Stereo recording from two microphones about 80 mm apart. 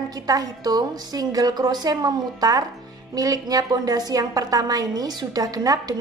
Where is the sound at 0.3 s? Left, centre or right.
Right.